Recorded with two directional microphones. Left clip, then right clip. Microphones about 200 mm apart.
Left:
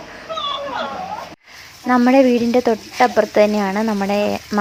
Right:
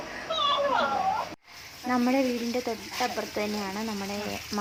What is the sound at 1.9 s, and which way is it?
Speech, 25° left (ahead or behind).